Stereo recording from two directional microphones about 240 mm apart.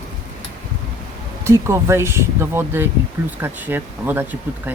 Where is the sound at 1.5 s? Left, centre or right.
Centre.